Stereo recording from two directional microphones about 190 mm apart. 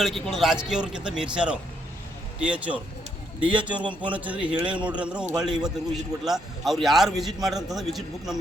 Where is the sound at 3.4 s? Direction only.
25° right (ahead or behind).